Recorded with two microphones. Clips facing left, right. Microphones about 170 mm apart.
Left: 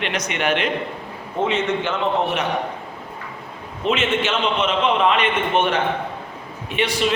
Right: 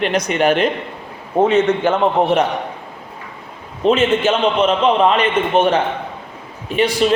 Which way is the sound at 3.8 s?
35° right (ahead or behind).